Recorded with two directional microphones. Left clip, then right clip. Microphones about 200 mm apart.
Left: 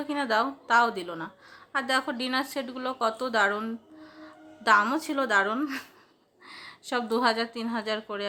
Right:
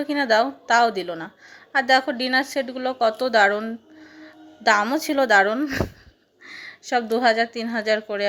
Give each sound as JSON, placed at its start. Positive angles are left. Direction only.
{"t": 0.0, "sound": "a woman's voice", "side_deg": -15}